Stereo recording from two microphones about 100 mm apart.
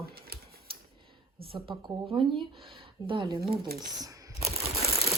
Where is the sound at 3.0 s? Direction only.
55° right (ahead or behind).